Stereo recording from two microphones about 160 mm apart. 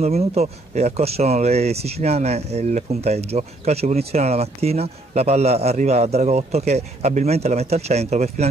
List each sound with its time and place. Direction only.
0.0 s speech: 40° right (ahead or behind)